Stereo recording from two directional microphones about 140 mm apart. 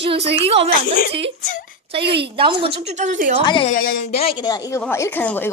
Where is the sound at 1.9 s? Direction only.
40° right (ahead or behind); by 3.4 s 65° right (ahead or behind).